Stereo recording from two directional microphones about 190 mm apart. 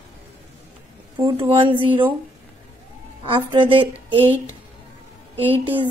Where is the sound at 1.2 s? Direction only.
25° right (ahead or behind).